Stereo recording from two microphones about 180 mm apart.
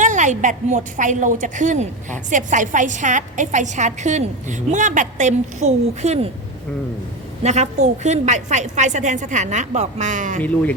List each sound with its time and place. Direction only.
0.0 s a woman's voice: 40° right (ahead or behind)
7.4 s a woman's voice: 40° right (ahead or behind)
10.4 s speech: 10° left (ahead or behind)